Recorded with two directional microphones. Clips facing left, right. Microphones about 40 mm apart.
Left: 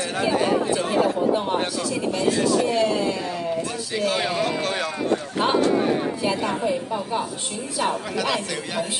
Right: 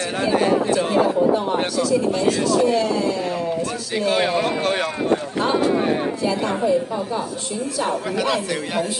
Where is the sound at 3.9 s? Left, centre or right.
Right.